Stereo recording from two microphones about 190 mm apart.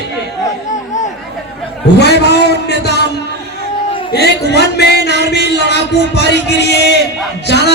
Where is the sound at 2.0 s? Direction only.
60° left (ahead or behind).